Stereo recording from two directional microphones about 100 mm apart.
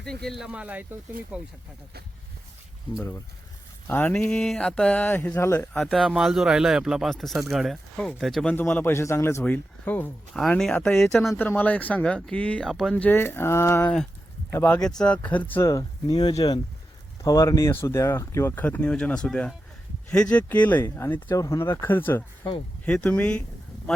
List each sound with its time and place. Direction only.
0.0 s speech: 5° left (ahead or behind)
0.4 s speech: 10° right (ahead or behind)
3.8 s speech: 20° left (ahead or behind)
4.1 s speech: 10° left (ahead or behind); by 5.5 s 25° left (ahead or behind)
5.8 s speech: centre (ahead or behind)
8.5 s speech: 20° left (ahead or behind)
9.4 s speech: 15° left (ahead or behind)
12.9 s speech: 15° left (ahead or behind)
13.8 s speech: 5° left (ahead or behind)
15.6 s speech: 40° left (ahead or behind); by 23.4 s 15° left (ahead or behind)